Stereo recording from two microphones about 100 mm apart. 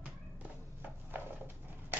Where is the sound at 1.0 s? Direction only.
20° right (ahead or behind).